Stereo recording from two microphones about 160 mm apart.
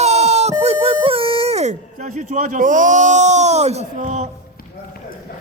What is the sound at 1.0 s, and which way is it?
Speech, 35° right (ahead or behind).